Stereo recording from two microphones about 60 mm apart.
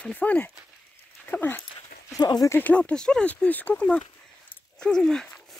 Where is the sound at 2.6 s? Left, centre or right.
Left.